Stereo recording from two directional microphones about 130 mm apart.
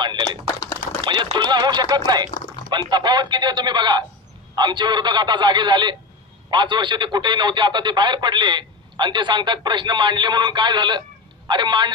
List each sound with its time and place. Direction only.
0.0 s typing: 35° right (ahead or behind)
1.0 s a sound: 40° right (ahead or behind)
2.7 s speech: 35° right (ahead or behind)